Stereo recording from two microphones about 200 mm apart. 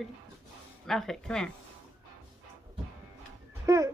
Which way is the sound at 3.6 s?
15° right (ahead or behind).